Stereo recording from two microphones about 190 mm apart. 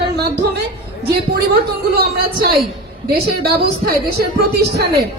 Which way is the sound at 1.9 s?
50° right (ahead or behind).